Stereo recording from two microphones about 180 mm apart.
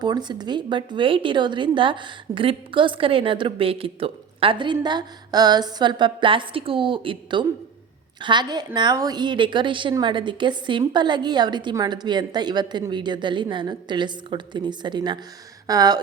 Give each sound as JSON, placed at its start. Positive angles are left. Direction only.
{"t": 0.0, "sound": "a woman's voice", "side_deg": -25}